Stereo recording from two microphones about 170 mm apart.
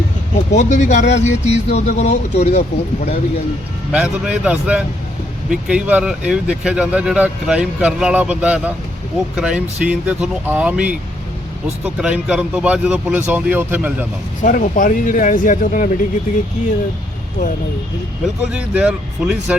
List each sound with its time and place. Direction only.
0.5 s speech: 45° left (ahead or behind)
3.9 s speech: 5° right (ahead or behind)
11.9 s speech: 5° right (ahead or behind)
14.4 s speech: 50° left (ahead or behind)
18.5 s speech: 5° right (ahead or behind)